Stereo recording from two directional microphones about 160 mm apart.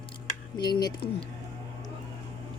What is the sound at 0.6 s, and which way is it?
Speech, 25° left (ahead or behind).